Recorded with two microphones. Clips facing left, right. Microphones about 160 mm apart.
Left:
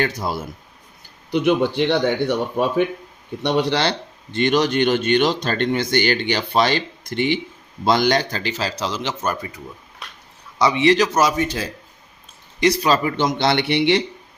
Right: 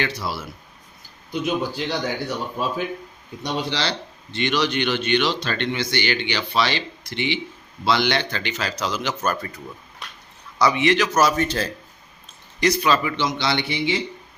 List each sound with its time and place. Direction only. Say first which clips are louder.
0.0 s speech: left 4 dB; 50° left (ahead or behind)
1.3 s a man's voice: left 7 dB; 70° left (ahead or behind); by 9.5 s 20° left (ahead or behind)
10.6 s a man's voice: left 3 dB; 30° left (ahead or behind)
11.1 s a man's voice: left 1 dB; 15° left (ahead or behind)
12.5 s speech: left 2 dB; 30° left (ahead or behind); by 14.0 s 70° left (ahead or behind)